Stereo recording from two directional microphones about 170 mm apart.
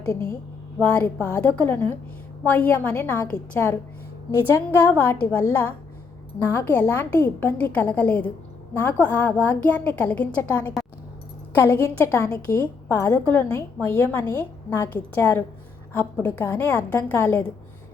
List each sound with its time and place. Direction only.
0.1 s a woman's voice: 15° left (ahead or behind)